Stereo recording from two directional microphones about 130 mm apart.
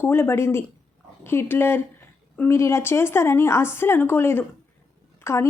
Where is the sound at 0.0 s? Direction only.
20° left (ahead or behind).